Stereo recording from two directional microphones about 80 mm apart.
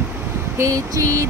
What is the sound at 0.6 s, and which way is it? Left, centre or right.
Music, right.